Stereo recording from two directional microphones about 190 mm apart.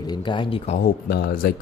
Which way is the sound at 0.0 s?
25° left (ahead or behind).